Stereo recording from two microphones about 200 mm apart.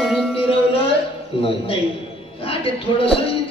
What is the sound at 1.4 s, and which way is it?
A woman's voice, 30° left (ahead or behind).